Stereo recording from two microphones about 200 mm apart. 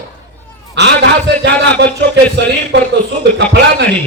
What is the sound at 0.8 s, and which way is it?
A man's voice, 60° right (ahead or behind).